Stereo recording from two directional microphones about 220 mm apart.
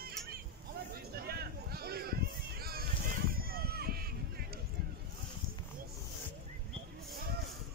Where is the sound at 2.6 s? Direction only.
45° right (ahead or behind).